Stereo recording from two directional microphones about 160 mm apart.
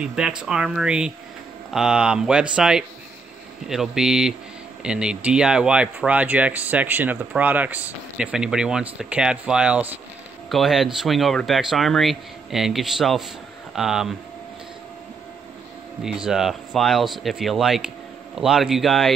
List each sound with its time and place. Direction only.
0.0 s speech: 5° right (ahead or behind)
16.0 s speech: 5° right (ahead or behind)